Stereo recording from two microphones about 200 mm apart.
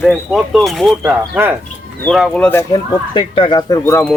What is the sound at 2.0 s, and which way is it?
Speech, 5° left (ahead or behind).